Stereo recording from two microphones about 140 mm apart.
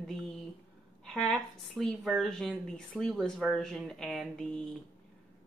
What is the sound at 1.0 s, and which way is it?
A woman's voice, 5° left (ahead or behind).